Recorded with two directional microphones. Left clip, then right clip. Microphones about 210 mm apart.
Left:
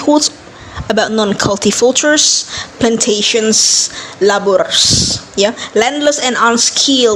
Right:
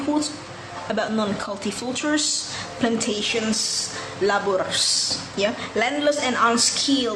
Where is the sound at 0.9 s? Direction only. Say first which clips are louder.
Left 11 dB; 40° left (ahead or behind).